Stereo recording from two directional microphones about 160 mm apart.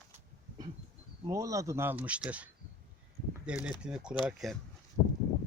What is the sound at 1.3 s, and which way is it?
Speech, 20° right (ahead or behind).